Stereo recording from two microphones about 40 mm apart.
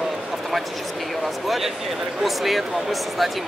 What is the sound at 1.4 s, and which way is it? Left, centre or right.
Speech, centre.